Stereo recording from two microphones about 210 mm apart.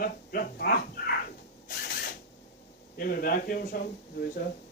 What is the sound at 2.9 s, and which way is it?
Speech, 45° left (ahead or behind).